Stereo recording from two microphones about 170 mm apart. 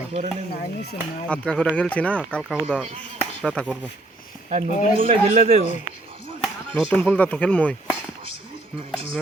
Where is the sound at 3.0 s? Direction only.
5° left (ahead or behind).